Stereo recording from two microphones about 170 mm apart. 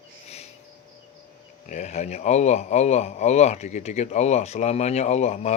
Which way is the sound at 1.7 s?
45° left (ahead or behind).